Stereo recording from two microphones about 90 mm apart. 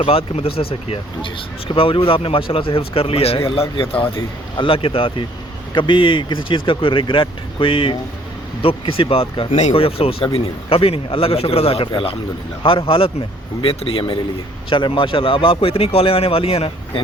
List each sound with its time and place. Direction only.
0.0 s speech: 90° left
5.7 s speech: 65° left (ahead or behind)
8.6 s speech: 90° left
14.7 s speech: 65° left (ahead or behind); by 17.0 s 85° left